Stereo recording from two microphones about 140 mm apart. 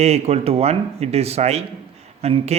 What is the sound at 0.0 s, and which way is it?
Speech, 50° right (ahead or behind).